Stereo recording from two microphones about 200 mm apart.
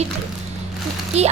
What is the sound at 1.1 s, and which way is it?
Speech, 30° right (ahead or behind).